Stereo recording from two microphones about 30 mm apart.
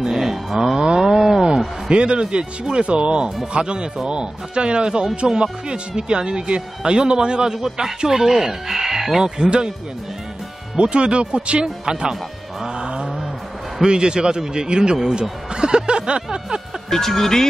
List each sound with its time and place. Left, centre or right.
0.1 s cattle: centre
1.0 s a sound: centre
1.9 s speech: right
7.5 s speech: centre
9.4 s speech: right
10.8 s speech: right
11.6 s speech: right
12.6 s vehicle: right
13.8 s speech: right
15.5 s snicker: right
16.9 s speech: centre